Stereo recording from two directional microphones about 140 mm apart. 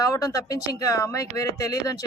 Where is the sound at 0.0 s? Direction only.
25° left (ahead or behind).